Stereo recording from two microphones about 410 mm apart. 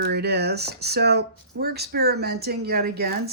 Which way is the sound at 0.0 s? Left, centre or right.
Right.